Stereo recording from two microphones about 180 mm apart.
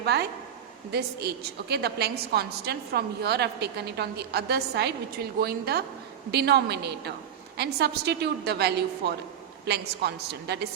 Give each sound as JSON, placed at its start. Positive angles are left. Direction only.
{"t": 0.0, "sound": "a woman's voice", "side_deg": -65}